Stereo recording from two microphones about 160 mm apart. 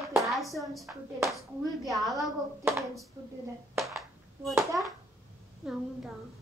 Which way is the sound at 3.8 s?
Centre (ahead or behind).